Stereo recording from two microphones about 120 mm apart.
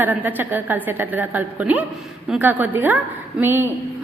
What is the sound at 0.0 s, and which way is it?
A woman's voice, 15° right (ahead or behind).